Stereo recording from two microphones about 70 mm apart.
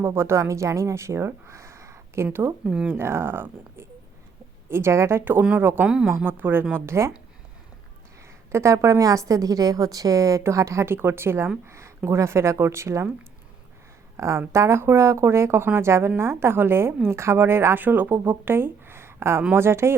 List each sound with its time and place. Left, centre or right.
0.0 s speech: right
2.6 s speech: centre
2.9 s speech: right
5.8 s speech: centre
6.2 s speech: right
8.5 s a woman's voice: right
14.2 s a woman's voice: right
17.8 s speech: right